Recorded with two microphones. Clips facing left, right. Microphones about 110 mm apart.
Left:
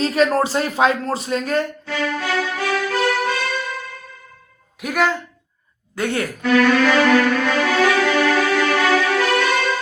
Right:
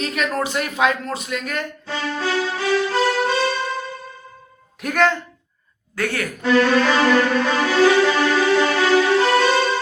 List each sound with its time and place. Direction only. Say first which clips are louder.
0.0 s speech: left 6 dB; 30° left (ahead or behind)
1.9 s music: right 3 dB; 30° right (ahead or behind)
4.8 s speech: right 1 dB; 5° left (ahead or behind)
6.0 s speech: left 2 dB; 25° left (ahead or behind)
6.4 s speech: left 1 dB; 30° right (ahead or behind)
7.6 s music: right 4 dB; 30° right (ahead or behind)